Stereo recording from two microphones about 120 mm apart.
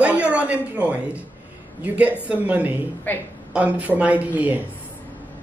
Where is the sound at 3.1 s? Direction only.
15° left (ahead or behind).